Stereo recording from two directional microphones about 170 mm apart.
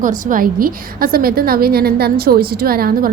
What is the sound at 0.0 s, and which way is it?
A woman's voice, 55° right (ahead or behind).